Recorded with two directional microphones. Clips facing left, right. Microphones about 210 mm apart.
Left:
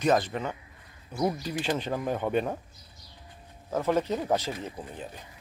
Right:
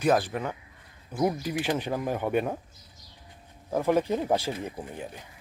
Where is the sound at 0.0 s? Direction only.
10° right (ahead or behind).